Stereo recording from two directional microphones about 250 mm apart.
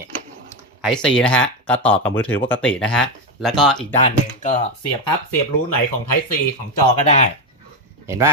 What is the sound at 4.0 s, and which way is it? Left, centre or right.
Speech, left.